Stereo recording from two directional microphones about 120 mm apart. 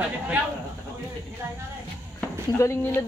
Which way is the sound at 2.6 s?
20° left (ahead or behind).